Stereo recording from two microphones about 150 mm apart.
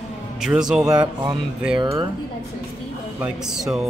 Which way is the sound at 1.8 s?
35° right (ahead or behind).